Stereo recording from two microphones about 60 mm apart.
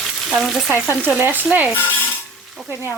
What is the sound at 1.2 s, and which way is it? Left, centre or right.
Stir, right.